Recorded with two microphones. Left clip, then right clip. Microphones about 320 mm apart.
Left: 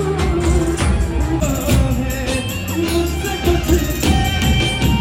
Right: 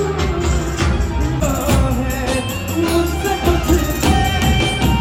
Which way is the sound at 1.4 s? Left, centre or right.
Centre.